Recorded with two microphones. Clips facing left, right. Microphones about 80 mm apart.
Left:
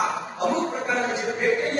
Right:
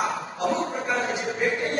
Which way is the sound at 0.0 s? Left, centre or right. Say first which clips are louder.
Left 2 dB; left.